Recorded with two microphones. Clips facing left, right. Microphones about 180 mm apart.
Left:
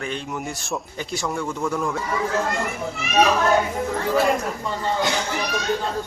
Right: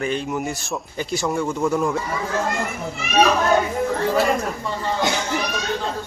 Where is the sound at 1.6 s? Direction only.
15° right (ahead or behind).